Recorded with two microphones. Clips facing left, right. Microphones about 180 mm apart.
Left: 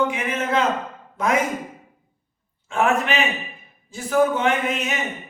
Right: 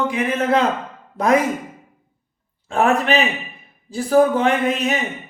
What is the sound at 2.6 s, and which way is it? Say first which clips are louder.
Speech: right 3 dB; 35° right (ahead or behind).